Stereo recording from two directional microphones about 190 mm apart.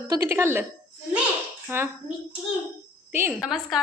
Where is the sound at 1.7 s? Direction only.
10° right (ahead or behind).